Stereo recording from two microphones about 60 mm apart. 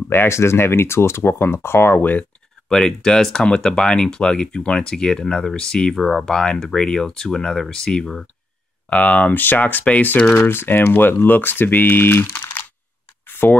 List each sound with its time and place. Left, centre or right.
0.3 s speech: left
2.7 s speech: centre
8.8 s speech: left
10.3 s speech: left
13.3 s a sound: left